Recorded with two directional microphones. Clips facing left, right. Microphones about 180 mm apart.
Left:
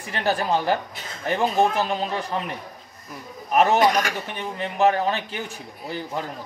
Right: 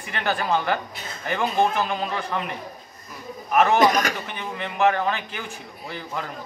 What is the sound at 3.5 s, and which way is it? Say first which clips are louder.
Speech: even; 35° left (ahead or behind).